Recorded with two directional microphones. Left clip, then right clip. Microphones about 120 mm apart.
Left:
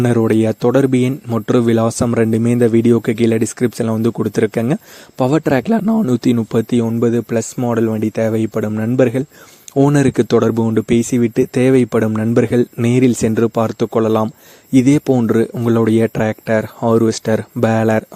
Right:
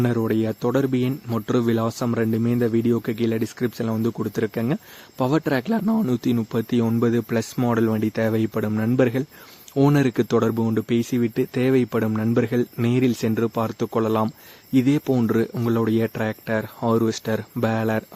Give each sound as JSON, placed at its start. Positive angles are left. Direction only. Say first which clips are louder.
{"t": 0.0, "sound": "speech", "louder": "left 8 dB", "side_deg": 70}
{"t": 1.3, "sound": "speech", "louder": "left 8 dB", "side_deg": 60}
{"t": 7.0, "sound": "a man's voice", "louder": "left 6 dB", "side_deg": 35}
{"t": 9.7, "sound": "speech", "louder": "left 6 dB", "side_deg": 55}